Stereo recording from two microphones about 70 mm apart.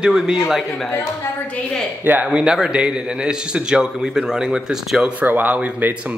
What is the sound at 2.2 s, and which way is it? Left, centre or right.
A man's voice, centre.